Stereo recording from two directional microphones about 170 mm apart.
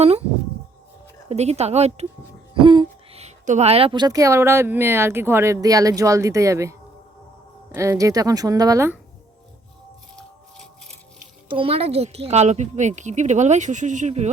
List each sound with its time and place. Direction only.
0.0 s speech: 35° right (ahead or behind)
1.3 s speech: 40° right (ahead or behind); by 9.0 s 15° right (ahead or behind)
10.2 s music: 5° left (ahead or behind)
11.4 s speech: 30° right (ahead or behind)